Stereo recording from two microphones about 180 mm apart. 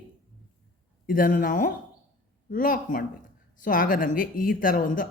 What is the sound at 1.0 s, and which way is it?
A man's voice, 50° left (ahead or behind).